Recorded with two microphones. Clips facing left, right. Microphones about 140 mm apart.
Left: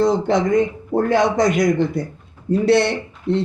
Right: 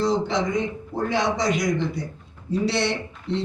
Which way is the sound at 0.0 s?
55° left (ahead or behind).